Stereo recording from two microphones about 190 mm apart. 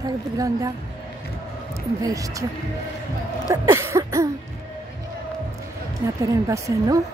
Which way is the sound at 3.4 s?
15° right (ahead or behind).